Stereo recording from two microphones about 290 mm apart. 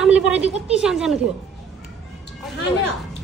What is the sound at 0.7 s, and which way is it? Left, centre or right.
Speech, centre.